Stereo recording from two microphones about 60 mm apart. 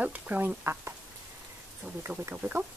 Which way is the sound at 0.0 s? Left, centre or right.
Right.